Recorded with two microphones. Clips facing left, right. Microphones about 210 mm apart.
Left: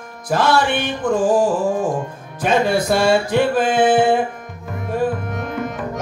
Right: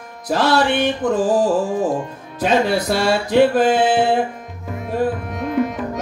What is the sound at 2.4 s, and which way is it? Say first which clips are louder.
Music: even; 50° left (ahead or behind).